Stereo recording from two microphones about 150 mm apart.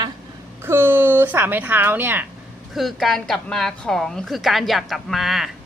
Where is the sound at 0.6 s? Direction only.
15° right (ahead or behind).